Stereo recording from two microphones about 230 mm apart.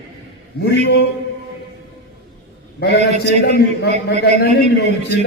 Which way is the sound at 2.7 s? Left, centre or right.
Left.